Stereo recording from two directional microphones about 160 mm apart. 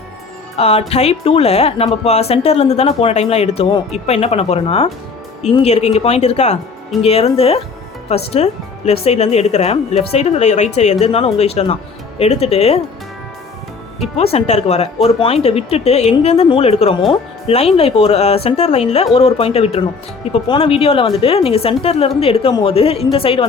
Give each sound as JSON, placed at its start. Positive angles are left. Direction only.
{"t": 0.5, "sound": "speech", "side_deg": 40}
{"t": 14.2, "sound": "speech", "side_deg": 40}